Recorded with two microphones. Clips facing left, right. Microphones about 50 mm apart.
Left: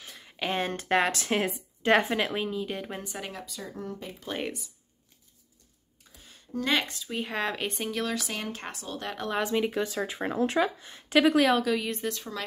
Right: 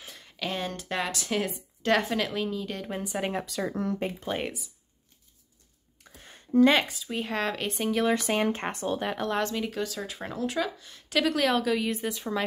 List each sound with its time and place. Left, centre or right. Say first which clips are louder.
0.0 s a sound: even; centre
0.4 s speech: left 3 dB; left; by 2.9 s centre
3.0 s speech: right 6 dB; centre
3.4 s speech: right 8 dB; right
4.3 s speech: left 3 dB; centre
6.2 s a sound: right 11 dB; right
6.7 s speech: right 3 dB; centre
8.1 s speech: right 8 dB; right
8.9 s speech: right 6 dB; centre
9.2 s speech: left 1 dB; centre
9.5 s speech: left 4 dB; left
11.3 s speech: left 2 dB; centre